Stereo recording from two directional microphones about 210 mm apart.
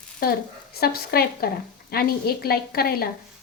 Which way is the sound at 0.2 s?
45° left (ahead or behind).